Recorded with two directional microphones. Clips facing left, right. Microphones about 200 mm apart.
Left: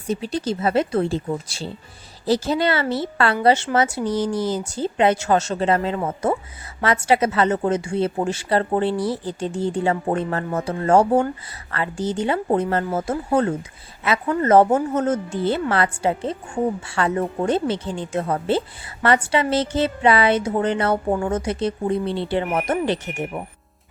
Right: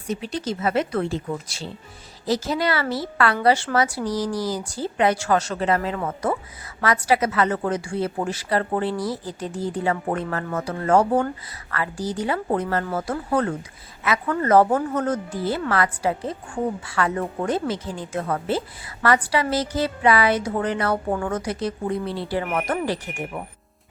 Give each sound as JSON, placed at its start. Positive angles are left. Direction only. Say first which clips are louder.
{"t": 0.1, "sound": "a woman's voice", "louder": "left 3 dB", "side_deg": 30}